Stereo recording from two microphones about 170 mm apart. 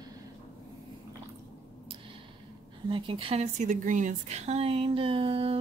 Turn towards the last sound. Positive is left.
turn(degrees=-35)  # may be behind; listen again after turning